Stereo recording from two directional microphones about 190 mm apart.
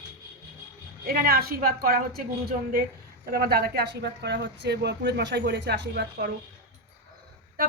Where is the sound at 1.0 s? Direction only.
50° right (ahead or behind).